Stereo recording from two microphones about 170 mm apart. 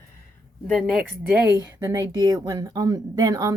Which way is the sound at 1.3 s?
15° right (ahead or behind).